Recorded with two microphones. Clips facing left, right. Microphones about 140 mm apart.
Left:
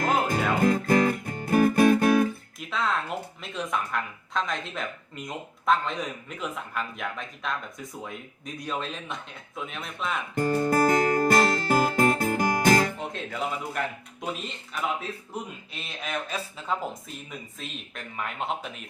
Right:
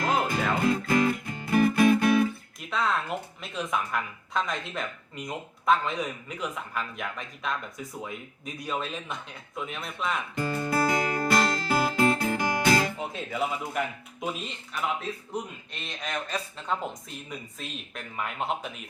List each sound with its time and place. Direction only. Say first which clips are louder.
0.0 s music: left 2 dB; 50° left (ahead or behind)
2.6 s speech: even; centre (ahead or behind)
10.3 s music: left 7 dB; 45° left (ahead or behind)
13.0 s speech: right 1 dB; 5° right (ahead or behind)